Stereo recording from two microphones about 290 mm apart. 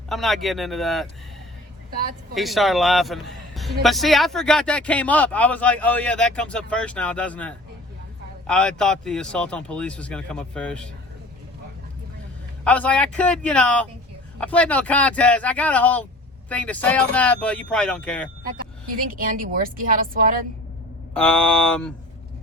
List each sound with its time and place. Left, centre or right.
0.1 s a man's voice: centre
2.3 s a man's voice: centre
12.6 s a man's voice: centre
19.1 s a woman's voice: right
21.1 s a man's voice: centre